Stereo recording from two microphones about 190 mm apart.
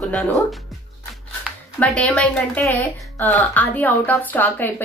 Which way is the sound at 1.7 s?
5° left (ahead or behind).